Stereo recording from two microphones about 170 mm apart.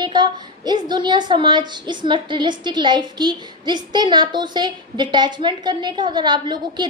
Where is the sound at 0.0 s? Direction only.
25° right (ahead or behind).